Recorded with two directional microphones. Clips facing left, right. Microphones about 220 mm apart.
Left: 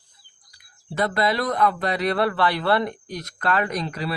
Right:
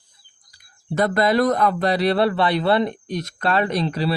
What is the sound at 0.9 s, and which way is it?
A man's voice, 45° right (ahead or behind).